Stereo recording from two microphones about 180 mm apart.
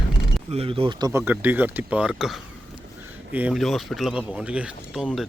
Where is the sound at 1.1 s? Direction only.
10° right (ahead or behind).